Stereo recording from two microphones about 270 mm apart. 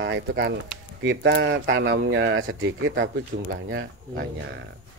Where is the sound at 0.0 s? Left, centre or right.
Right.